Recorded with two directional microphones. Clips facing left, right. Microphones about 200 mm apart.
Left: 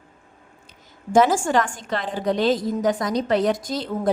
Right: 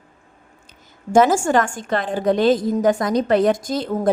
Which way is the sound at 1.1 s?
45° right (ahead or behind).